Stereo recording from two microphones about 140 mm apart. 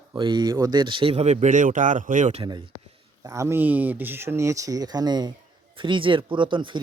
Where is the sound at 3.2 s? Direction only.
20° right (ahead or behind).